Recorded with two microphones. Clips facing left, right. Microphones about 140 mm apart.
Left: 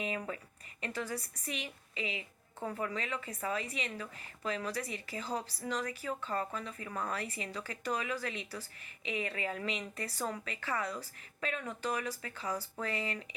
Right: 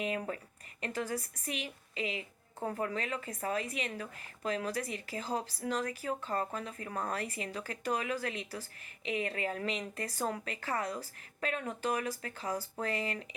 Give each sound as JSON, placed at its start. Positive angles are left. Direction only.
{"t": 0.0, "sound": "a woman's voice", "side_deg": -40}